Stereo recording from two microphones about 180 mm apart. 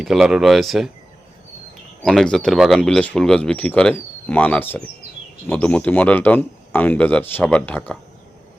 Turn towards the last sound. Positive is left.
turn(degrees=10)  # may be behind; listen again after turning